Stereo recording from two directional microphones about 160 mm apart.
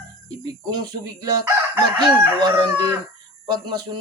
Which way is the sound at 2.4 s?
25° right (ahead or behind).